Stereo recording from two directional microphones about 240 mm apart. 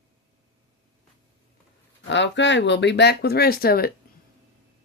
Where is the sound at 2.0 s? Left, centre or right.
Left.